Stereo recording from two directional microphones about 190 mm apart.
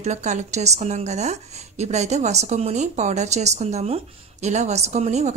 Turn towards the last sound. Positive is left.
turn(degrees=-35)  # may be behind; listen again after turning